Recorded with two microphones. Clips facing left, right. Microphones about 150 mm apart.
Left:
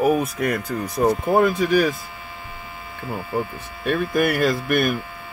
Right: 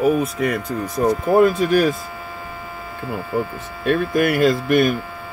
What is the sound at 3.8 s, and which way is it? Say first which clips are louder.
Speech: right 2 dB; 5° left (ahead or behind).